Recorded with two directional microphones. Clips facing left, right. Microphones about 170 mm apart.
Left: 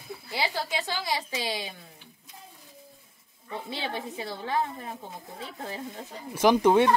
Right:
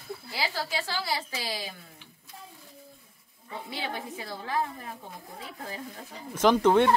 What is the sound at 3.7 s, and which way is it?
Speech, 25° left (ahead or behind).